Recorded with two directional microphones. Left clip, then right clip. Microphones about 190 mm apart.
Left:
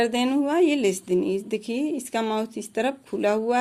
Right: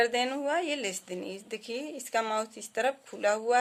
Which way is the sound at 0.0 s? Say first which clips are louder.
Left 4 dB; 10° left (ahead or behind).